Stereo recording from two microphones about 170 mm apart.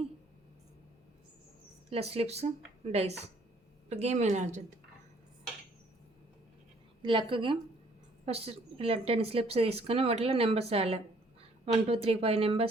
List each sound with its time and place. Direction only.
1.9 s a woman's voice: 35° right (ahead or behind)
7.0 s a woman's voice: 30° right (ahead or behind)